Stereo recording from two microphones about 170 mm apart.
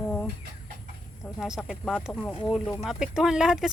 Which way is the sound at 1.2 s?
20° left (ahead or behind).